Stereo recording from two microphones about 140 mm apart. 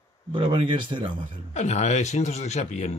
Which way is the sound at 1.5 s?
55° left (ahead or behind).